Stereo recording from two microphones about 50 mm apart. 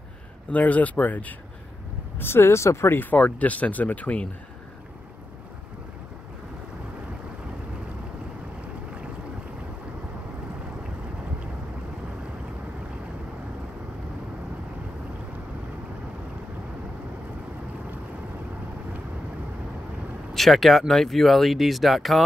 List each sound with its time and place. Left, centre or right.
0.5 s speech: left
2.1 s speech: left
3.3 s speech: left
20.3 s speech: centre